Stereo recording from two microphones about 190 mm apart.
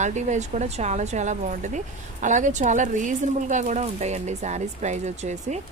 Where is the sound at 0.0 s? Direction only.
40° right (ahead or behind).